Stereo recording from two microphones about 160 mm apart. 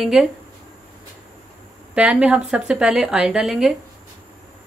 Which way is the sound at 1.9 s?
5° right (ahead or behind).